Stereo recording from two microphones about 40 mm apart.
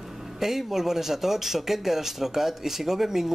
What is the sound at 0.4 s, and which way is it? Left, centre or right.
Speech, centre.